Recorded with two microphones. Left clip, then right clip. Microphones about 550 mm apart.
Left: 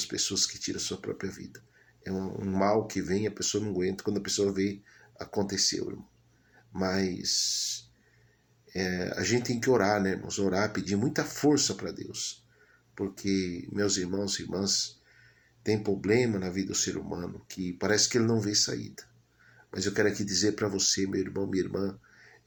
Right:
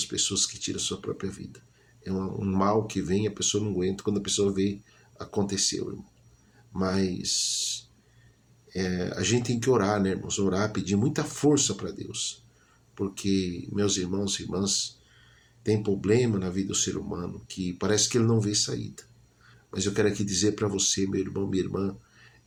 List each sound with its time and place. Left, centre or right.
0.0 s speech: right
6.7 s speech: right
8.7 s speech: right